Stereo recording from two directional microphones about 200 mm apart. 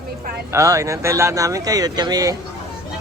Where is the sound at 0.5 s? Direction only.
15° right (ahead or behind).